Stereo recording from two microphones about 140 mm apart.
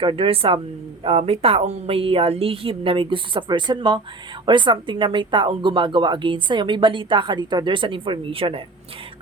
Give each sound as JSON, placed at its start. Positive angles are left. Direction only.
{"t": 0.0, "sound": "a woman's voice", "side_deg": -40}